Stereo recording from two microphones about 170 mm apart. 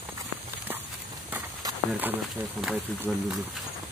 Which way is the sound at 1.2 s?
10° right (ahead or behind).